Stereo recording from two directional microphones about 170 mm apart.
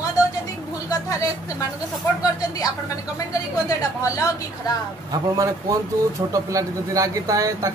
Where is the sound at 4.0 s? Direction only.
20° left (ahead or behind).